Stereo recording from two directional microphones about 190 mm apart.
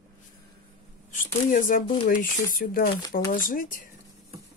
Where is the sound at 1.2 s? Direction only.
45° left (ahead or behind).